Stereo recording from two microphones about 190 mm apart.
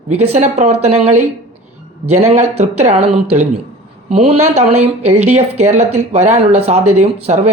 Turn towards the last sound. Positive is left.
turn(degrees=-35)  # may be behind; listen again after turning